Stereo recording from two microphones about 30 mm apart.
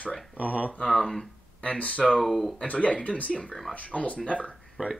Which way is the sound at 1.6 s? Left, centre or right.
Left.